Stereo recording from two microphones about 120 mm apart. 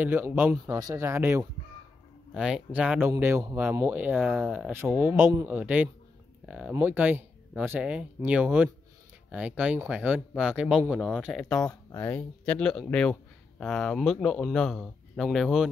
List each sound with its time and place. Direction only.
0.0 s speech: 15° right (ahead or behind)
2.3 s speech: 5° right (ahead or behind)
3.1 s speech: 25° right (ahead or behind); by 6.7 s 5° right (ahead or behind)
6.7 s speech: 15° right (ahead or behind)